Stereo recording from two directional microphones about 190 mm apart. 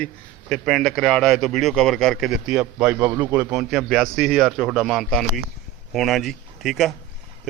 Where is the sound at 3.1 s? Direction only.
20° right (ahead or behind).